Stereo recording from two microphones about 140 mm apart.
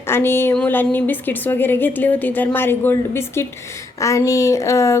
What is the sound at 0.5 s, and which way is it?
A woman's voice, 10° left (ahead or behind).